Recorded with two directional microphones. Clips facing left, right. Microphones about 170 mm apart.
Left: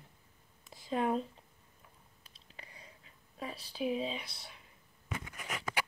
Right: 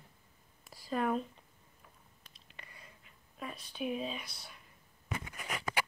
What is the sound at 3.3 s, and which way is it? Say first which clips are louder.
Speech: left 2 dB; 30° left (ahead or behind).